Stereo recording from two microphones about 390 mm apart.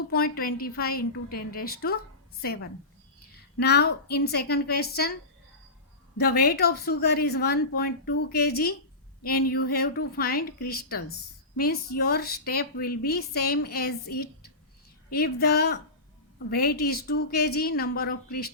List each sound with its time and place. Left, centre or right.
0.1 s a woman's voice: left
6.1 s speech: left